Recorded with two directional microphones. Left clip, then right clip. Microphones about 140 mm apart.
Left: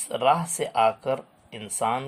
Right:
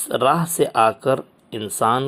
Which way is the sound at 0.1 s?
30° right (ahead or behind).